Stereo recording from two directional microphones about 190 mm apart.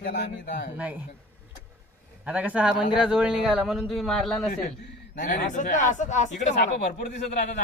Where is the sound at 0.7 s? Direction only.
5° right (ahead or behind).